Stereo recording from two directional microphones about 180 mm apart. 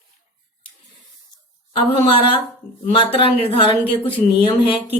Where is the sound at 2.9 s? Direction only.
30° left (ahead or behind).